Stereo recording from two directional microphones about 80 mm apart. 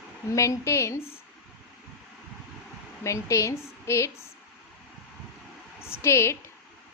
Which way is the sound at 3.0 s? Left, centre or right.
Left.